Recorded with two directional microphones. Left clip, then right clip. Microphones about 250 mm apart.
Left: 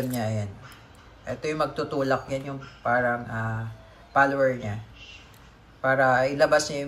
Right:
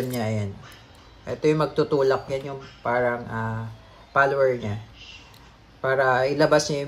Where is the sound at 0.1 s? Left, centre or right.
Right.